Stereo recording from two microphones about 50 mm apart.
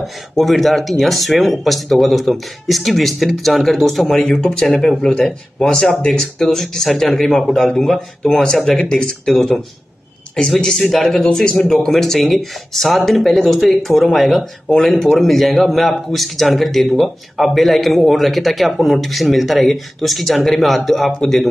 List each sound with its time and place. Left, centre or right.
0.0 s a man's voice: centre
10.8 s a man's voice: centre